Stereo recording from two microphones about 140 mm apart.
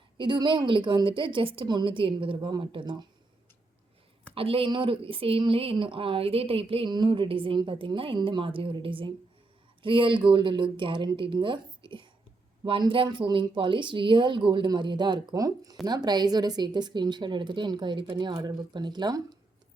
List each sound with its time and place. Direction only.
0.2 s speech: 35° right (ahead or behind)
4.4 s speech: 40° right (ahead or behind)